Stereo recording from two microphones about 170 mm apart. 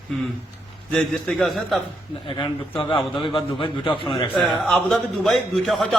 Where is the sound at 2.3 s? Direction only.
30° left (ahead or behind).